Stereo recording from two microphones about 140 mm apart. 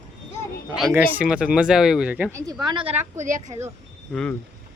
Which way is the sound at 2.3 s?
20° right (ahead or behind).